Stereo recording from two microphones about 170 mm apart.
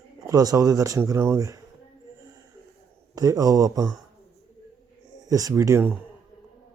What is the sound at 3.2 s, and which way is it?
Speech, 20° right (ahead or behind).